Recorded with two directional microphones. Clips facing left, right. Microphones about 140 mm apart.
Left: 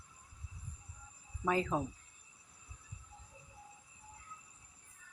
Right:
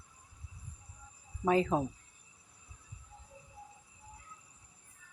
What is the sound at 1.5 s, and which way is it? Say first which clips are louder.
Speech: right 5 dB; 25° right (ahead or behind).